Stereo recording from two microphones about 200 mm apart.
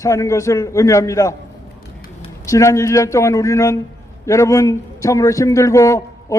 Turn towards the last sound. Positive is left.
turn(degrees=15)  # may be behind; listen again after turning